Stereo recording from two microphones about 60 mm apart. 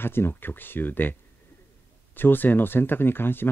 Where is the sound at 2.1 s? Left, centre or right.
Left.